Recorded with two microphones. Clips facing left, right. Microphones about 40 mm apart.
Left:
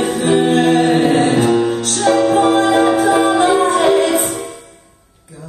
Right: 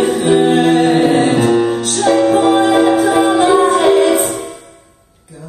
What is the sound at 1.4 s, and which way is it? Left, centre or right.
Music, centre.